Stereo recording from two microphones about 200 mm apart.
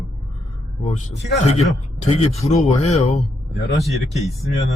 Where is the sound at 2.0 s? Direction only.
30° left (ahead or behind).